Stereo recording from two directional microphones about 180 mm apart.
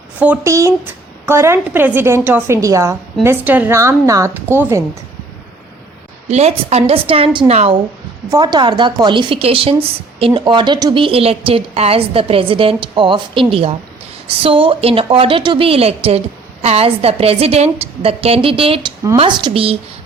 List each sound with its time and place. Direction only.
0.2 s a woman's voice: 10° right (ahead or behind)
6.3 s a woman's voice: 35° right (ahead or behind)
8.3 s a woman's voice: 20° right (ahead or behind)